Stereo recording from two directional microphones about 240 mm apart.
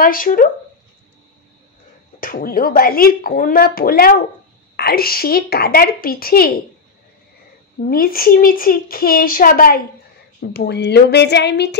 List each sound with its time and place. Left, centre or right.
0.0 s speech: left
2.1 s speech: left
7.8 s speech: left